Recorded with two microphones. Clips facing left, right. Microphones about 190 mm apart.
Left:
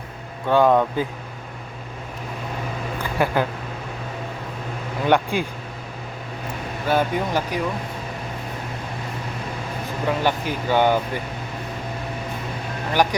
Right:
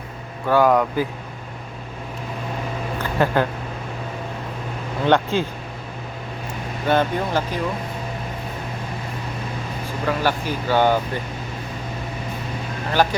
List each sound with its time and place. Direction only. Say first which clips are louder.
0.4 s speech: even; 25° left (ahead or behind)
3.0 s a sound: right 2 dB; 10° left (ahead or behind)
5.0 s speech: right 1 dB; 15° left (ahead or behind)
6.8 s speech: right 1 dB; 10° left (ahead or behind)
10.1 s speech: even; 20° left (ahead or behind)
12.9 s speech: right 1 dB; 15° left (ahead or behind)